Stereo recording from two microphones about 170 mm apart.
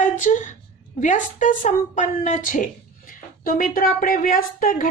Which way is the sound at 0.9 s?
45° left (ahead or behind).